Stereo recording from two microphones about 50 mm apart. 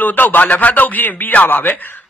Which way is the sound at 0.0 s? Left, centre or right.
Left.